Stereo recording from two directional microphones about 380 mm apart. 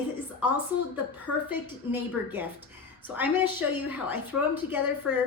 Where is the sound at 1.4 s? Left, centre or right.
Centre.